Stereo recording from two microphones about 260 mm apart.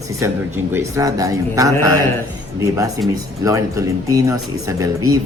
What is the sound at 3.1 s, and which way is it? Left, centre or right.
Speech, centre.